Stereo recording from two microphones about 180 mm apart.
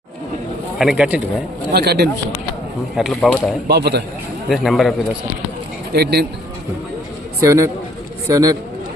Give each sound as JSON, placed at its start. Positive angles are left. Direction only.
{"t": 0.8, "sound": "speech", "side_deg": -5}
{"t": 1.7, "sound": "speech", "side_deg": -65}
{"t": 2.9, "sound": "speech", "side_deg": 0}
{"t": 3.7, "sound": "speech", "side_deg": -65}
{"t": 4.4, "sound": "speech", "side_deg": 0}
{"t": 5.9, "sound": "speech", "side_deg": -65}
{"t": 7.4, "sound": "a man's voice", "side_deg": -15}